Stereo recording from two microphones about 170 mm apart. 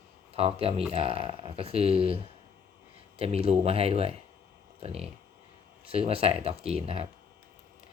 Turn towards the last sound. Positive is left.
turn(degrees=-35)  # may be behind; listen again after turning